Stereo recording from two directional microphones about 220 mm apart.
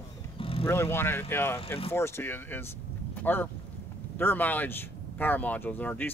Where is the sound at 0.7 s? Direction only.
10° left (ahead or behind).